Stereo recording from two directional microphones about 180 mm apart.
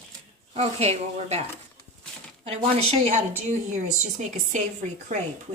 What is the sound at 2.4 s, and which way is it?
A woman's voice, 35° right (ahead or behind).